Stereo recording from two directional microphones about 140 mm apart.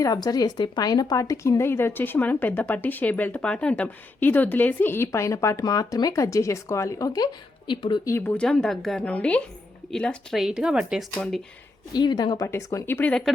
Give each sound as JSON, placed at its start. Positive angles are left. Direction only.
{"t": 0.0, "sound": "speech", "side_deg": 25}
{"t": 7.7, "sound": "a woman's voice", "side_deg": 35}
{"t": 8.0, "sound": "a woman's voice", "side_deg": 15}
{"t": 11.9, "sound": "a woman's voice", "side_deg": 30}
{"t": 12.5, "sound": "a woman's voice", "side_deg": 20}